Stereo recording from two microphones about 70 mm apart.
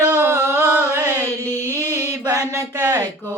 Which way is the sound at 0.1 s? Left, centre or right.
Right.